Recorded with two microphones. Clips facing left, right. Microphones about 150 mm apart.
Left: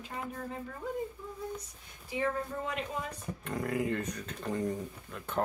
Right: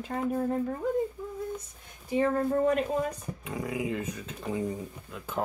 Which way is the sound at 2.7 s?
45° right (ahead or behind).